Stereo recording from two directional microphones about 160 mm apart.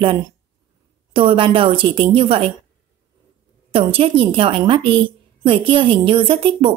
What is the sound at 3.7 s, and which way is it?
A woman's voice, 35° right (ahead or behind).